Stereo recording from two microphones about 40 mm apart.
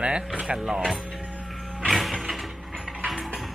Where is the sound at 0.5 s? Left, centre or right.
Centre.